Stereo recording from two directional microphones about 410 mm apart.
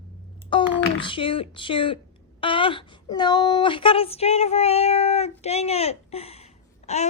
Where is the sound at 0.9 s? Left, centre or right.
Centre.